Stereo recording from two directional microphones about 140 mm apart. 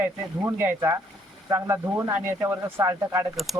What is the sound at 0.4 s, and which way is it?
Speech, 15° right (ahead or behind).